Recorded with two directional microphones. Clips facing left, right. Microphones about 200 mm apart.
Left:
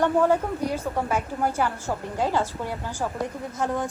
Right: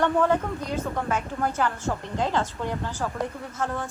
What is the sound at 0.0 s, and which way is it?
A woman's voice, 10° left (ahead or behind).